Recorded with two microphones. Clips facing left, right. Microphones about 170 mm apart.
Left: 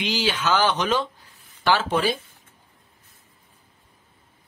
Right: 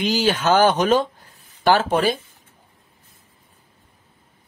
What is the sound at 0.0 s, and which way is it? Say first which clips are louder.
Speech: right 5 dB; 45° right (ahead or behind).